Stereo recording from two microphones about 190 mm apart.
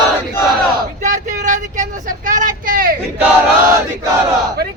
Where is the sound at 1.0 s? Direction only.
40° right (ahead or behind).